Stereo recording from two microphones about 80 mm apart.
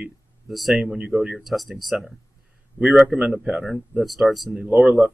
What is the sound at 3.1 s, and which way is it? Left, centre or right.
Speech, centre.